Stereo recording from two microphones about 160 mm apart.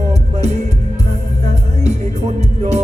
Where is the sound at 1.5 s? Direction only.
45° right (ahead or behind).